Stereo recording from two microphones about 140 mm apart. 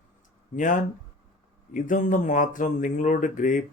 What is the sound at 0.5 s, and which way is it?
Speech, 70° left (ahead or behind).